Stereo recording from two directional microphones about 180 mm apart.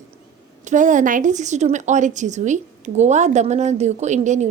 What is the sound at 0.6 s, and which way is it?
A woman's voice, 45° right (ahead or behind).